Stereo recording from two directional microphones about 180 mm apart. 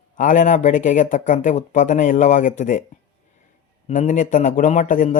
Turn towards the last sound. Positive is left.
turn(degrees=45)  # may be behind; listen again after turning